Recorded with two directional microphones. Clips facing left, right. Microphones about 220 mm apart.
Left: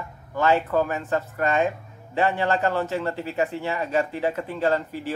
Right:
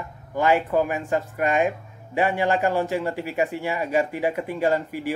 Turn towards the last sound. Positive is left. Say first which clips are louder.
# right 1 dB
turn(degrees=-10)  # may be behind; listen again after turning